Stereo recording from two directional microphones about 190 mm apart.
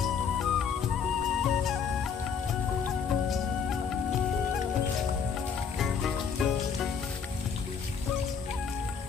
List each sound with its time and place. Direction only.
0.0 s music: centre (ahead or behind)
2.8 s music: centre (ahead or behind)
5.8 s music: centre (ahead or behind)